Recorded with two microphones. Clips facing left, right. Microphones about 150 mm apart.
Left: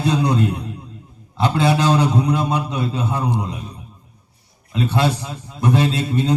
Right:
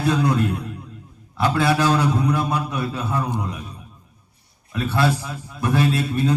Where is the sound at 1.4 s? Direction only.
20° left (ahead or behind).